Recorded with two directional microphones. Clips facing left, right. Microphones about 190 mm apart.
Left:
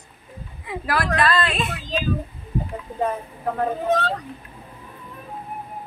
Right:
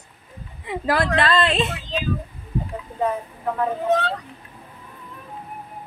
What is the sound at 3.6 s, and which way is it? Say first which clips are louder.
Speech: right 1 dB; 40° left (ahead or behind).